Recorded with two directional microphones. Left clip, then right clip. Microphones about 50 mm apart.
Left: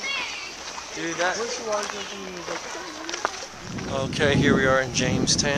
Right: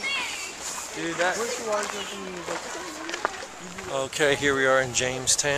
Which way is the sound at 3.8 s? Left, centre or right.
Centre.